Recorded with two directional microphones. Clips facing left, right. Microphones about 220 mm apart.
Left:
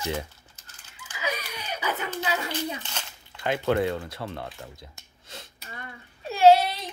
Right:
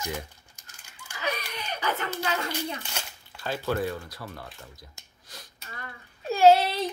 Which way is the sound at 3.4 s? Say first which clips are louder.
Left 4 dB; 20° left (ahead or behind).